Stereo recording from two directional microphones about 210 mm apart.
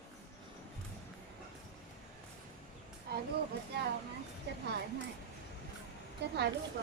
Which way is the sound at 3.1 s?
50° right (ahead or behind).